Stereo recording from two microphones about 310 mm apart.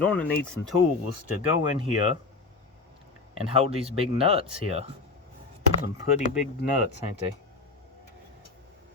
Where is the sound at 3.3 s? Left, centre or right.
Centre.